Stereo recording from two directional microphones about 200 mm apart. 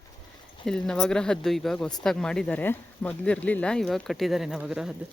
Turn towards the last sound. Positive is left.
turn(degrees=-5)  # may be behind; listen again after turning